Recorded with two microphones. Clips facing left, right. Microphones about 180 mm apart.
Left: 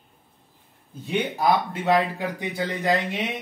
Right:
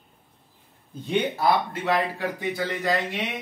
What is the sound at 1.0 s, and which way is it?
Speech, 20° left (ahead or behind).